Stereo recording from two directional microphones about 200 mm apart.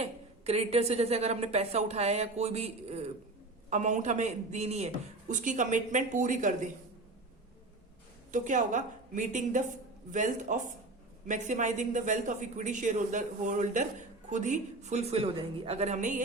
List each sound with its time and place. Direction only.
0.0 s a woman's voice: 30° right (ahead or behind)
8.3 s a woman's voice: 40° right (ahead or behind)